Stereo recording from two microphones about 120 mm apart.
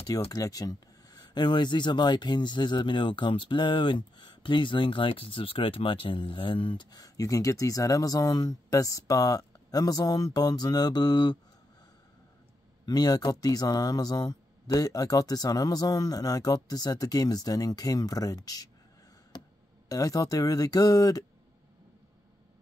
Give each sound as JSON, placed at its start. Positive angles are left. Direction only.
{"t": 0.3, "sound": "speech", "side_deg": 30}
{"t": 12.8, "sound": "speech", "side_deg": 35}
{"t": 19.9, "sound": "speech", "side_deg": 30}